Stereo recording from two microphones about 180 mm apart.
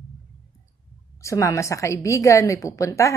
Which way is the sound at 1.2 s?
15° left (ahead or behind).